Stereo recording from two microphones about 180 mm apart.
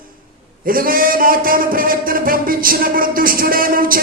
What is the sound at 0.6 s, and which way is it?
A man's voice, 50° right (ahead or behind).